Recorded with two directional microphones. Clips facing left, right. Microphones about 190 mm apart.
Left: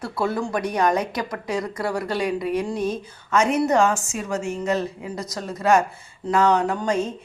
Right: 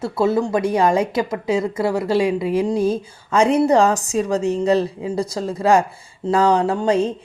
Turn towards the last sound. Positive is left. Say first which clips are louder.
# right 5 dB
turn(degrees=-30)  # may be behind; listen again after turning